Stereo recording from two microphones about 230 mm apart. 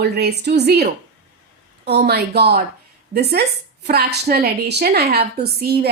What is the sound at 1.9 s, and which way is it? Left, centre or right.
A woman's voice, right.